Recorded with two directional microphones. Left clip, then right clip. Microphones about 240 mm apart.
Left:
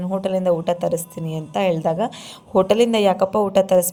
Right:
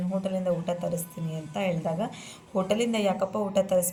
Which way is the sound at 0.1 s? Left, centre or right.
Left.